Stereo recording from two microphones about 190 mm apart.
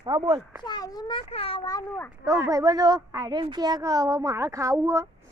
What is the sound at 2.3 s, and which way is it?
Speech, 15° right (ahead or behind).